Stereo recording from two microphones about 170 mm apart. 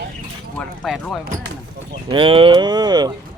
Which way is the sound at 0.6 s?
5° left (ahead or behind).